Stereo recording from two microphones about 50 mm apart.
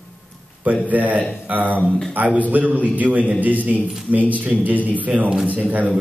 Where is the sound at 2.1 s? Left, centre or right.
Right.